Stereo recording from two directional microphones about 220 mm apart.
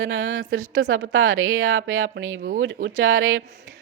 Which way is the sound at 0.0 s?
65° right (ahead or behind).